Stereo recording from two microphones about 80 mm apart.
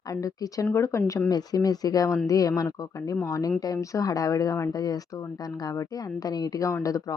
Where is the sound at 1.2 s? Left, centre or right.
Left.